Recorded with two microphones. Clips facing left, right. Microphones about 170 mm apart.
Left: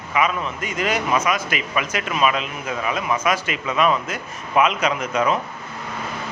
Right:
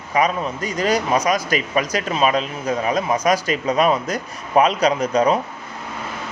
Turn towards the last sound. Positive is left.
turn(degrees=-35)  # may be behind; listen again after turning